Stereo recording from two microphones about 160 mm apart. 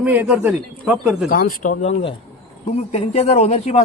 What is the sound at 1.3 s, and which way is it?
Speech, 65° left (ahead or behind).